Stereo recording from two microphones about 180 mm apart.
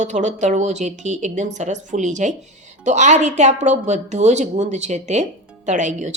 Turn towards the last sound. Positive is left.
turn(degrees=-45)  # may be behind; listen again after turning